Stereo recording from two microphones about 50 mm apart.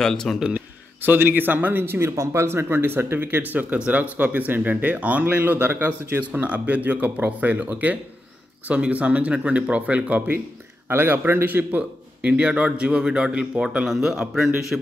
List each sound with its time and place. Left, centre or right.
0.0 s a man's voice: centre
1.0 s a man's voice: right
1.3 s speech: right
3.5 s speech: right
6.4 s a man's voice: right
10.9 s speech: right
11.4 s speech: right
12.2 s a man's voice: right; by 14.9 s centre